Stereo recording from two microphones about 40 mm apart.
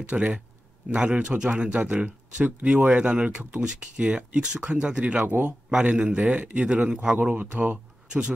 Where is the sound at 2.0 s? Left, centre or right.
Right.